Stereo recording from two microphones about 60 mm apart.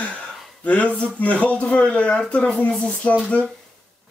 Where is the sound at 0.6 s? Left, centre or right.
Left.